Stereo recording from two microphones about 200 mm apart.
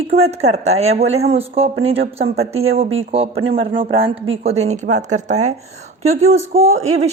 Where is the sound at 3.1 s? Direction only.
30° right (ahead or behind).